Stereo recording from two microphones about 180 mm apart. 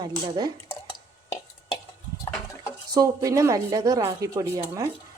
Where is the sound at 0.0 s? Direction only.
25° right (ahead or behind).